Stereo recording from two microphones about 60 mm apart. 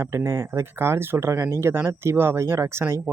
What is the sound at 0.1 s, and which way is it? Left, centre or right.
Speech, right.